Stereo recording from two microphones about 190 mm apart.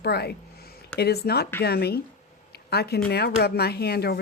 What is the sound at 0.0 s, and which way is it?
A woman's voice, 60° left (ahead or behind).